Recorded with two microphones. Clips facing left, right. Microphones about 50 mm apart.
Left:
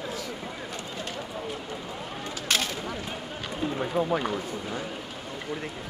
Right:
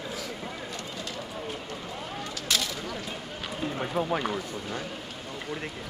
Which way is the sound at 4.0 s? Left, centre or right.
Centre.